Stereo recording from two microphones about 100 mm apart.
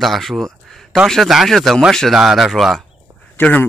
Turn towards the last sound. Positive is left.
turn(degrees=15)  # may be behind; listen again after turning